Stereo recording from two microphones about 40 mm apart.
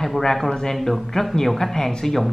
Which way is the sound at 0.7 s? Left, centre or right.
Centre.